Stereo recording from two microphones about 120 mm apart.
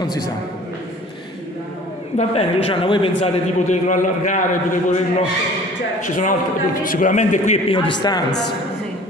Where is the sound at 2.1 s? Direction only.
55° left (ahead or behind).